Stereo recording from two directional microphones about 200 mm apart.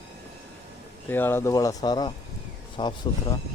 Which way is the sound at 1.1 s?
10° left (ahead or behind).